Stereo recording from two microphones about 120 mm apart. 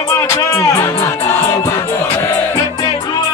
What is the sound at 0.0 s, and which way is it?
Music, 25° left (ahead or behind).